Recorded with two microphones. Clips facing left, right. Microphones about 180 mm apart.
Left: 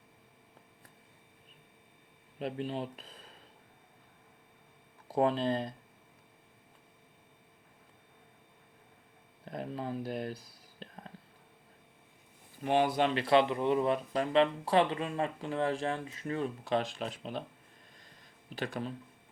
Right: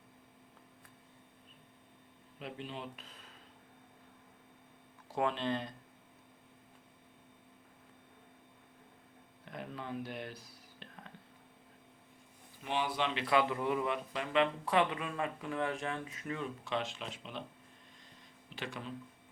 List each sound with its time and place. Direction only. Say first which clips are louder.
2.4 s speech: left 8 dB; 40° left (ahead or behind)
5.1 s speech: left 5 dB; 35° left (ahead or behind)
9.4 s speech: left 6 dB; 35° left (ahead or behind)
10.8 s whispering: left 5 dB; 35° left (ahead or behind)
12.6 s speech: left 7 dB; 50° left (ahead or behind)
13.2 s speech: left 3 dB; 25° left (ahead or behind); by 17.4 s 40° left (ahead or behind)
18.5 s speech: left 6 dB; 40° left (ahead or behind)